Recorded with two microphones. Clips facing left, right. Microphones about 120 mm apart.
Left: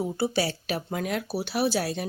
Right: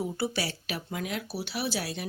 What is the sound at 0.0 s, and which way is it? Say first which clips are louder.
Speech: left 5 dB; 30° left (ahead or behind).